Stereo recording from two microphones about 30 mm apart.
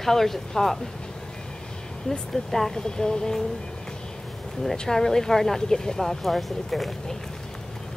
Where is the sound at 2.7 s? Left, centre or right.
Left.